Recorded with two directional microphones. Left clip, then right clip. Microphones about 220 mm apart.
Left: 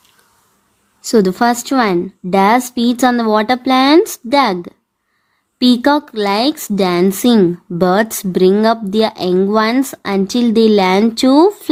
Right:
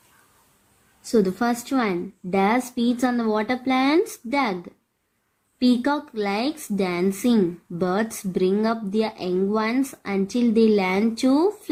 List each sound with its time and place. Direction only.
1.0 s speech: 45° left (ahead or behind)